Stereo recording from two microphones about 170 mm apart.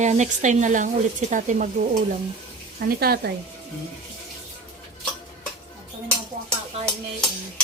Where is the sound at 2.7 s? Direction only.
60° right (ahead or behind).